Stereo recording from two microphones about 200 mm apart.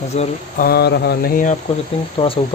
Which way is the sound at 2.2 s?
25° left (ahead or behind).